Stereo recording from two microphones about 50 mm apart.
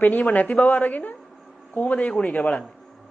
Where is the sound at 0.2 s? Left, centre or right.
Left.